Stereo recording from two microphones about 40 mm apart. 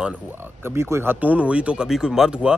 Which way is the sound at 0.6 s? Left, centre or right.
Right.